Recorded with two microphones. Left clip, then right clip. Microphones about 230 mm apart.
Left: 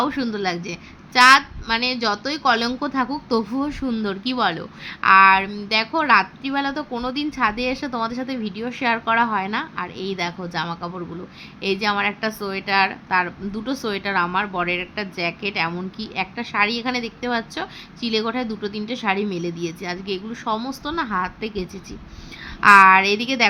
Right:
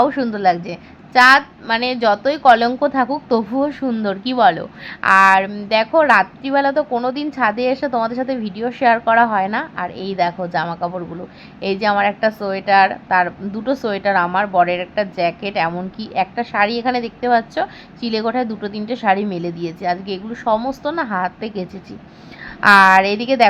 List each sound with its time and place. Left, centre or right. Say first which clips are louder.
0.0 s a woman's voice: right 8 dB; centre